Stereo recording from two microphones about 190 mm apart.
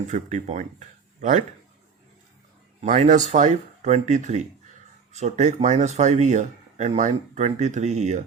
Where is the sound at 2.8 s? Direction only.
40° right (ahead or behind).